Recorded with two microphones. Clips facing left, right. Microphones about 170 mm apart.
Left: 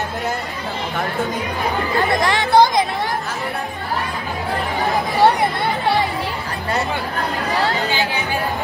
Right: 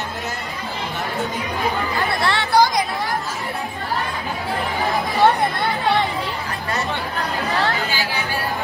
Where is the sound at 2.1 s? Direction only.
15° left (ahead or behind).